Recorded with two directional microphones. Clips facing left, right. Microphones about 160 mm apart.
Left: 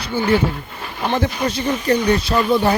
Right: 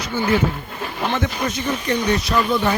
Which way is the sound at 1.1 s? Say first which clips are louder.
Left 5 dB; 30° left (ahead or behind).